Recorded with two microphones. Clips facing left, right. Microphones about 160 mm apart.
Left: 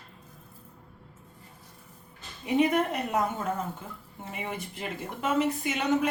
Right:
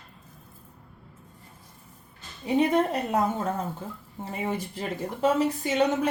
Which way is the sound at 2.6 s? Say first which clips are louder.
Right 2 dB; 35° right (ahead or behind).